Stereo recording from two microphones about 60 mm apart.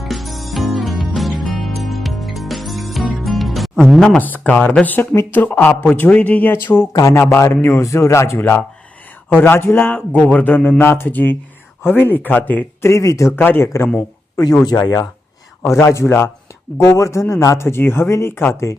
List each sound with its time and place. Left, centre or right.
0.0 s music: centre
3.8 s speech: centre
4.2 s speech: left
4.6 s speech: centre
5.3 s a man's voice: left
6.5 s a man's voice: left
8.4 s a man's voice: left
12.8 s speech: left
13.3 s a man's voice: left
14.3 s speech: left
15.6 s speech: left
16.7 s speech: left